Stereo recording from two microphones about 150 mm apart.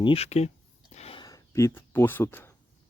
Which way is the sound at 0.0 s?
40° left (ahead or behind).